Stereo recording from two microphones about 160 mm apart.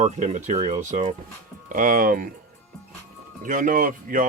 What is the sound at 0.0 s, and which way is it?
Speech, 50° right (ahead or behind).